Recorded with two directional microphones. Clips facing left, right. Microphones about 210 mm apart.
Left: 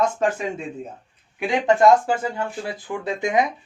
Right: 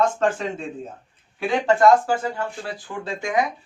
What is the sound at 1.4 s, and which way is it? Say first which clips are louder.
A man's voice: left 1 dB; 15° left (ahead or behind).